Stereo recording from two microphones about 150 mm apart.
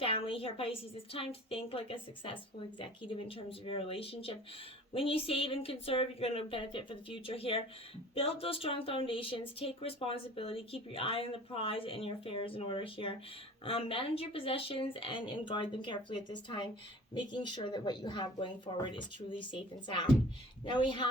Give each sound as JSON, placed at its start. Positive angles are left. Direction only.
{"t": 0.0, "sound": "speech", "side_deg": 40}